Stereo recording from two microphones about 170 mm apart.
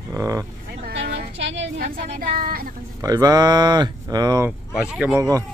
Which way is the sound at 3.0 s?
20° right (ahead or behind).